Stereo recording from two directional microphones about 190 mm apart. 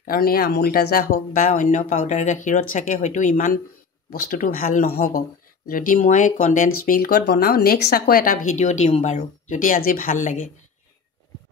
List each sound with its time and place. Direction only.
0.0 s speech: 50° left (ahead or behind)